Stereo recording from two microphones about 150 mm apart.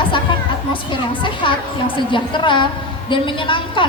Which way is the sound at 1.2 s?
35° left (ahead or behind).